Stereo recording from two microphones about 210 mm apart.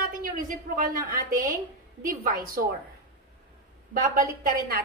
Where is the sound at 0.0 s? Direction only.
40° right (ahead or behind).